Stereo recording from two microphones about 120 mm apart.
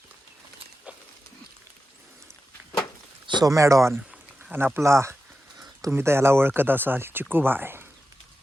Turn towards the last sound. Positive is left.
turn(degrees=-15)  # may be behind; listen again after turning